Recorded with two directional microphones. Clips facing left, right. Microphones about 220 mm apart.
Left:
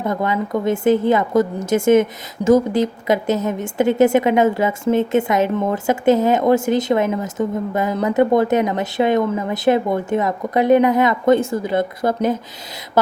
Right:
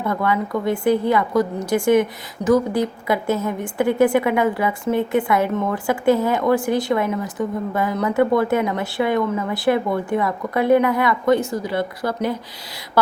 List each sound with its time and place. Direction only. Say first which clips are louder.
0.0 s a woman's voice: left 1 dB; 20° left (ahead or behind)